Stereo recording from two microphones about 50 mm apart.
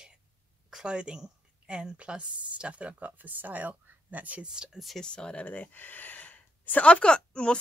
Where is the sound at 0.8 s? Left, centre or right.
Centre.